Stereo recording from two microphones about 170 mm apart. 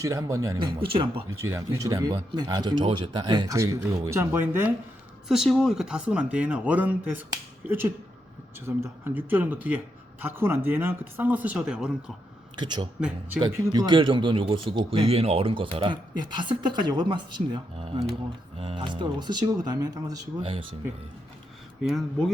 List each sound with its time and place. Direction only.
0.0 s speech: 20° right (ahead or behind)
0.8 s speech: 30° right (ahead or behind)
1.4 s speech: 15° right (ahead or behind)
5.3 s a man's voice: centre (ahead or behind)
12.5 s speech: 25° right (ahead or behind)
21.8 s speech: centre (ahead or behind)